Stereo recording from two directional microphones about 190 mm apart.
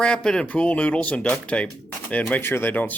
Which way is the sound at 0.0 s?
5° left (ahead or behind).